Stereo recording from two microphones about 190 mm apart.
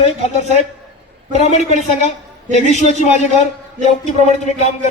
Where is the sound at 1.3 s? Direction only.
35° left (ahead or behind).